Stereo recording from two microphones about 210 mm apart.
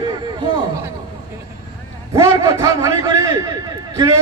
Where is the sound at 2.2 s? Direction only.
15° right (ahead or behind).